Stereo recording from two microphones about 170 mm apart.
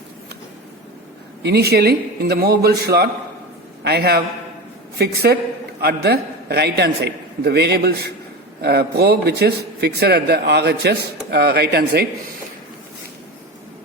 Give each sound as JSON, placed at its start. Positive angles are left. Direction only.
{"t": 1.4, "sound": "a man's voice", "side_deg": -80}